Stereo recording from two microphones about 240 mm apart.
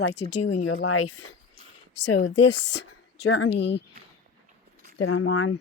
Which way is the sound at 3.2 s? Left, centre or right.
Left.